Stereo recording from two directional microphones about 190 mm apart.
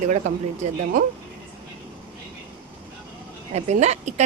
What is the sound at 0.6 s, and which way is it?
Speech, 45° right (ahead or behind).